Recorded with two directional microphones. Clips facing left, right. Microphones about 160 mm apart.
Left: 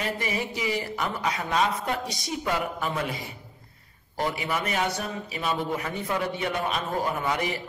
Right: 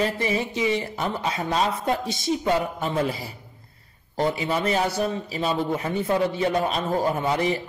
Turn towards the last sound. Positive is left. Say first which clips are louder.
# right 5 dB
turn(degrees=-30)  # may be behind; listen again after turning